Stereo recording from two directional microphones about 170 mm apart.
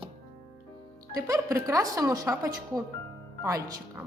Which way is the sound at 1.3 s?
20° right (ahead or behind).